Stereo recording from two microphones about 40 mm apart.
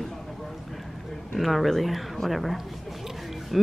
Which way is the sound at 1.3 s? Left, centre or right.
Centre.